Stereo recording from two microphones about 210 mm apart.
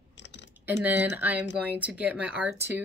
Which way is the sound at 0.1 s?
55° left (ahead or behind).